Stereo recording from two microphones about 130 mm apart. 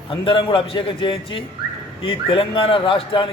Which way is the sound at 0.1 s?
40° left (ahead or behind).